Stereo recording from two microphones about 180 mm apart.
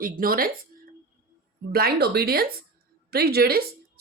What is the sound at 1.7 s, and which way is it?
A woman's voice, 60° right (ahead or behind).